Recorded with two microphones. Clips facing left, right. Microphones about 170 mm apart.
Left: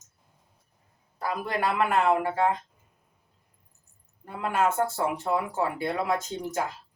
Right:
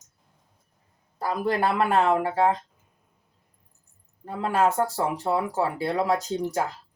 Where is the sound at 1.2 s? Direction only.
35° right (ahead or behind).